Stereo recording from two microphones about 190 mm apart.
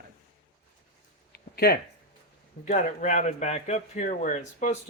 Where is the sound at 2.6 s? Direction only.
40° left (ahead or behind).